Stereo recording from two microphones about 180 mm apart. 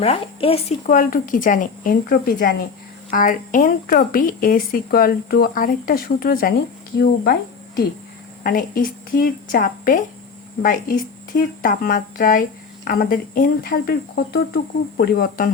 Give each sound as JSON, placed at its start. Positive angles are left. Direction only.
{"t": 0.0, "sound": "speech", "side_deg": 30}
{"t": 0.9, "sound": "a woman's voice", "side_deg": 50}
{"t": 8.4, "sound": "a woman's voice", "side_deg": 55}